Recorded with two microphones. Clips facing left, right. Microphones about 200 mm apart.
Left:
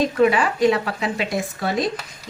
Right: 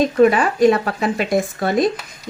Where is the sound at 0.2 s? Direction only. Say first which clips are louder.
Right 4 dB; 45° right (ahead or behind).